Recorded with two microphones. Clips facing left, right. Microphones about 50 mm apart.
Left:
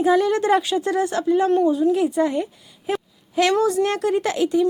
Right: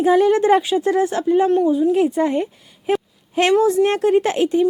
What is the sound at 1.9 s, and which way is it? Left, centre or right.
A woman's voice, right.